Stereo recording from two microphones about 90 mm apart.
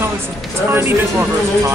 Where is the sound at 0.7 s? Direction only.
25° right (ahead or behind).